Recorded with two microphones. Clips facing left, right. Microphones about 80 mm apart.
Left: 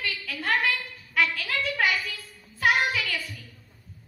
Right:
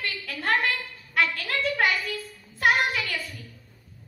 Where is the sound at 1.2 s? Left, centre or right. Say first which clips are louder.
Right 1 dB; right.